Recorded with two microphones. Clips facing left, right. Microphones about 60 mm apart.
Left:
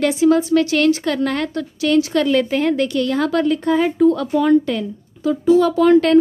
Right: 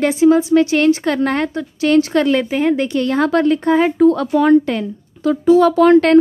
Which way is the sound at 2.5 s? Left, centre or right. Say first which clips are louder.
Right 1 dB; centre.